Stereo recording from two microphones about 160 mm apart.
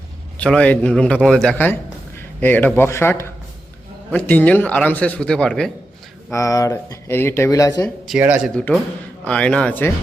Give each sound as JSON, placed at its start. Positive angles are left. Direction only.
{"t": 0.3, "sound": "speech", "side_deg": 5}
{"t": 6.3, "sound": "speech", "side_deg": 20}
{"t": 8.2, "sound": "speech", "side_deg": -10}
{"t": 8.5, "sound": "speech", "side_deg": 5}